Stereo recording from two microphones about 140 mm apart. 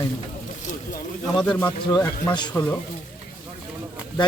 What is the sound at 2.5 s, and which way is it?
Speech, 10° left (ahead or behind).